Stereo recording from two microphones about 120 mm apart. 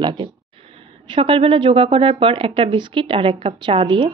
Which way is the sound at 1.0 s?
45° right (ahead or behind).